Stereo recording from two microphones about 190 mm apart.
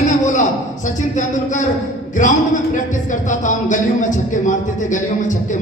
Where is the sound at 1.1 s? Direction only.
40° left (ahead or behind).